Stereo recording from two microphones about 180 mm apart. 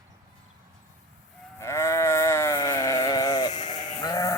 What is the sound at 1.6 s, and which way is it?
Sheep, 15° left (ahead or behind).